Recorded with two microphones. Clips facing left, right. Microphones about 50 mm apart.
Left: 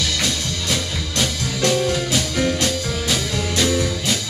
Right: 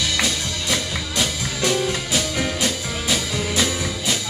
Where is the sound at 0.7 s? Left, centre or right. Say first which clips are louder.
Right 1 dB; centre.